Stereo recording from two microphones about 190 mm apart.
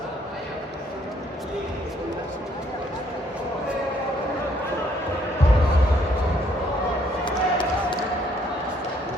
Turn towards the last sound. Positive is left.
turn(degrees=25)  # may be behind; listen again after turning